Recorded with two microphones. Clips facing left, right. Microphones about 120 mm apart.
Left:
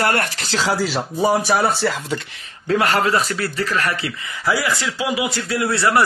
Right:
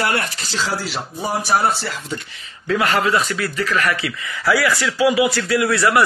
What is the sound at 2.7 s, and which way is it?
A man's voice, 40° left (ahead or behind).